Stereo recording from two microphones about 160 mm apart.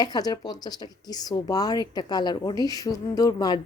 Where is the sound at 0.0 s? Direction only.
25° left (ahead or behind).